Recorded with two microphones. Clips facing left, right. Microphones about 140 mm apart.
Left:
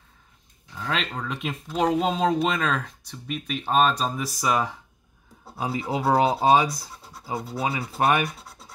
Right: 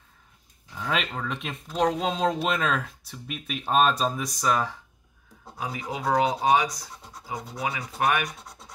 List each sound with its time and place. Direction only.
0.7 s speech: 5° right (ahead or behind)
5.6 s speech: 30° left (ahead or behind)
8.3 s scratch: 5° left (ahead or behind)